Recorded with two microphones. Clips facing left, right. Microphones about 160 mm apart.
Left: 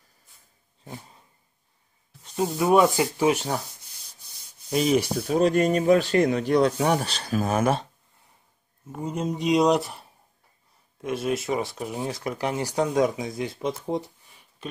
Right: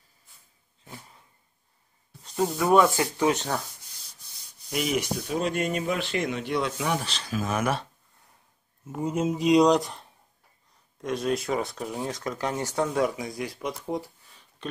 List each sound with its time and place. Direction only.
2.2 s rub: 5° left (ahead or behind)
2.5 s speech: 15° left (ahead or behind)
4.6 s speech: 30° left (ahead or behind)
8.9 s speech: 5° right (ahead or behind); by 14.4 s 25° left (ahead or behind)
14.6 s a sound: 5° left (ahead or behind)